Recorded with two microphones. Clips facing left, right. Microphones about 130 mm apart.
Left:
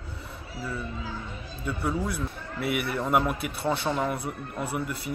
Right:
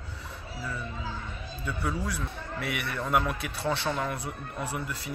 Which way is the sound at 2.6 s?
5° left (ahead or behind).